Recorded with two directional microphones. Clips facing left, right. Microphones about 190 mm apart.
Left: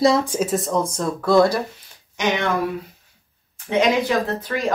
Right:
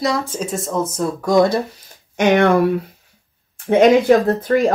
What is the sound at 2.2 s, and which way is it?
Speech, 60° right (ahead or behind).